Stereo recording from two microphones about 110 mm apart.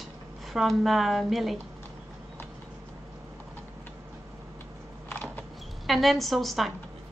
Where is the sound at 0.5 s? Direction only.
Centre (ahead or behind).